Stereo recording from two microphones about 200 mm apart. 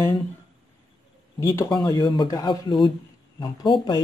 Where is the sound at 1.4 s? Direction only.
15° left (ahead or behind).